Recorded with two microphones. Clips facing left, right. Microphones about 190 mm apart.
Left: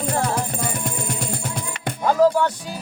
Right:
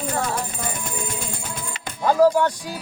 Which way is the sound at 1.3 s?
55° left (ahead or behind).